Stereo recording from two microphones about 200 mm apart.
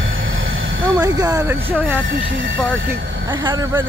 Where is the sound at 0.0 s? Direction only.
80° right.